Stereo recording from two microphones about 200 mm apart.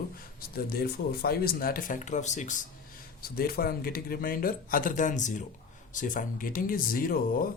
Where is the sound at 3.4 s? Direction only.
50° left (ahead or behind).